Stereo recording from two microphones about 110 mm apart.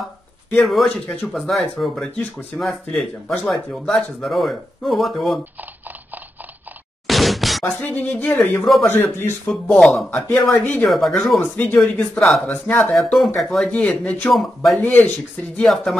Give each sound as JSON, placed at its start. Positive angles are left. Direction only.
{"t": 0.9, "sound": "speech", "side_deg": 5}
{"t": 7.1, "sound": "a sound", "side_deg": 0}
{"t": 7.6, "sound": "a man's voice", "side_deg": 15}
{"t": 9.5, "sound": "speech", "side_deg": 0}
{"t": 10.1, "sound": "speech", "side_deg": 15}
{"t": 10.9, "sound": "speech", "side_deg": 0}
{"t": 11.5, "sound": "speech", "side_deg": 15}
{"t": 13.7, "sound": "speech", "side_deg": 10}
{"t": 14.3, "sound": "speech", "side_deg": 0}
{"t": 14.8, "sound": "speech", "side_deg": 15}
{"t": 15.5, "sound": "speech", "side_deg": 0}